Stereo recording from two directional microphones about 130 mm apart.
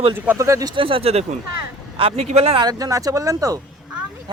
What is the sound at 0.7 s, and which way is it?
A man's voice, 45° right (ahead or behind).